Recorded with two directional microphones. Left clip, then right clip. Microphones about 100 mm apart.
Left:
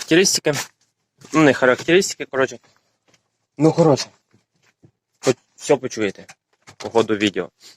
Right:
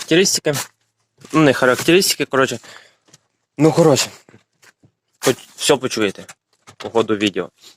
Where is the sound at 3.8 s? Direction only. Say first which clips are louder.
Right 3 dB; 45° right (ahead or behind).